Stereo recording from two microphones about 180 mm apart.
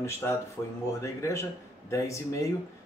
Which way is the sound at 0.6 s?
15° left (ahead or behind).